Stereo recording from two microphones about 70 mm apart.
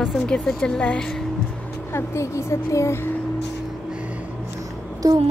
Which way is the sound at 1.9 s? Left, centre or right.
Left.